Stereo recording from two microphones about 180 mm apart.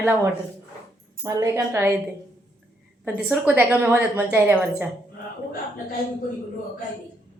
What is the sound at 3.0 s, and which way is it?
Speech, 5° right (ahead or behind).